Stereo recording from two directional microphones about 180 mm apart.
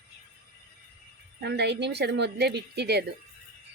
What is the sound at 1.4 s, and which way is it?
Speech, 70° right (ahead or behind).